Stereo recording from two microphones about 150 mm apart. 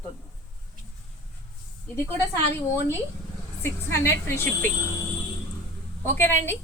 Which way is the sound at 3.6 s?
15° left (ahead or behind).